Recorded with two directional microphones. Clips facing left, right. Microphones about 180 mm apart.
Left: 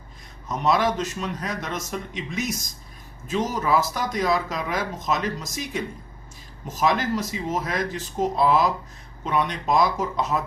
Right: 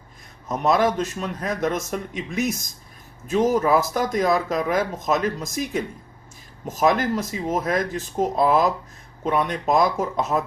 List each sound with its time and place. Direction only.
0.4 s speech: 50° right (ahead or behind)